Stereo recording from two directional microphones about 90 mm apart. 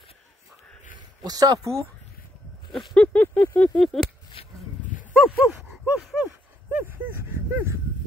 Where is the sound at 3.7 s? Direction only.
5° left (ahead or behind).